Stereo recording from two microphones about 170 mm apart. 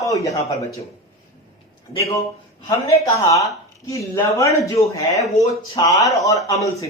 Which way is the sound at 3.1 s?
20° left (ahead or behind).